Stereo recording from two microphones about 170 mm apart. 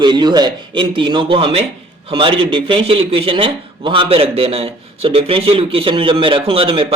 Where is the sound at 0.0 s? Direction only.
25° right (ahead or behind).